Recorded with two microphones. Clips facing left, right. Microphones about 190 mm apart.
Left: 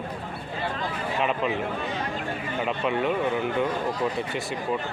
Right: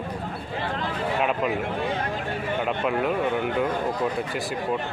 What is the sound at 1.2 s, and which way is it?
Speech, 5° right (ahead or behind).